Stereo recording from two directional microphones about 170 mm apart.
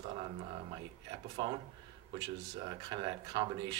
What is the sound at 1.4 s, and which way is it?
Speech, 30° right (ahead or behind).